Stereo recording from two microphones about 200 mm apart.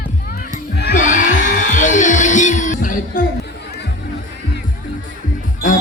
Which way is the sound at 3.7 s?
55° left (ahead or behind).